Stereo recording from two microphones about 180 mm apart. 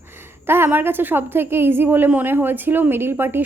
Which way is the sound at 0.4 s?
10° right (ahead or behind).